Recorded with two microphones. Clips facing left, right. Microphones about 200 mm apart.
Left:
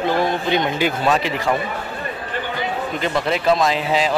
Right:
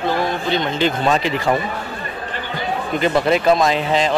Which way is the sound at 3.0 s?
Centre (ahead or behind).